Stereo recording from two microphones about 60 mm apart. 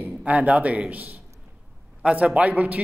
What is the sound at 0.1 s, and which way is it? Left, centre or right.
A man's voice, right.